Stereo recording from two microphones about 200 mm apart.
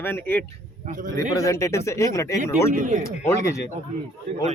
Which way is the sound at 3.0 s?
15° left (ahead or behind).